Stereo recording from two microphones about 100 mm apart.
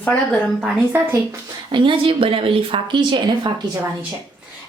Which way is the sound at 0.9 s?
20° right (ahead or behind).